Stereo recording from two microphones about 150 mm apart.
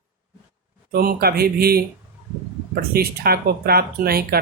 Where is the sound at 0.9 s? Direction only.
90° right.